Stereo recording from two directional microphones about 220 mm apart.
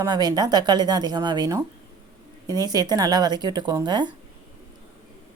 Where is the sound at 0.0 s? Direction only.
15° right (ahead or behind).